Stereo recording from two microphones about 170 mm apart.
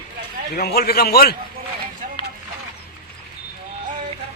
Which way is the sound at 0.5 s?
65° left (ahead or behind).